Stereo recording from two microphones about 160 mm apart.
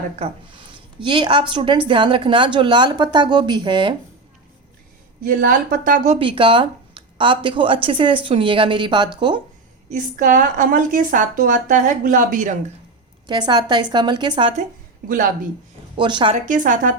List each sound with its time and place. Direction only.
0.2 s a woman's voice: 40° right (ahead or behind)
5.4 s a woman's voice: 60° right (ahead or behind)
6.1 s a woman's voice: 30° right (ahead or behind)
9.9 s a woman's voice: 55° right (ahead or behind)
13.2 s a woman's voice: 25° right (ahead or behind)
15.0 s a woman's voice: 60° right (ahead or behind)
16.0 s a woman's voice: 30° right (ahead or behind)
16.3 s a woman's voice: 55° right (ahead or behind)